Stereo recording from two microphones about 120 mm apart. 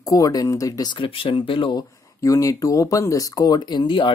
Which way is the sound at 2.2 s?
25° left (ahead or behind).